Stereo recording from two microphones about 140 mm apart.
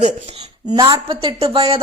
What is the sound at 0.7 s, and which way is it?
A woman's voice, 30° right (ahead or behind).